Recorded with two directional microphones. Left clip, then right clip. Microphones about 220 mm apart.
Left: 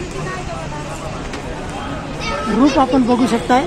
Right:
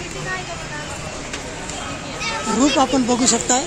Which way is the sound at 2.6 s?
5° right (ahead or behind).